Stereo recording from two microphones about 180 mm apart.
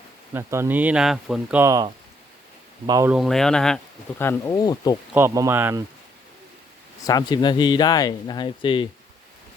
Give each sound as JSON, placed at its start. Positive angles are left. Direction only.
{"t": 0.3, "sound": "speech", "side_deg": -15}
{"t": 3.1, "sound": "speech", "side_deg": 0}
{"t": 4.2, "sound": "speech", "side_deg": 15}
{"t": 5.1, "sound": "speech", "side_deg": -15}
{"t": 7.0, "sound": "speech", "side_deg": 20}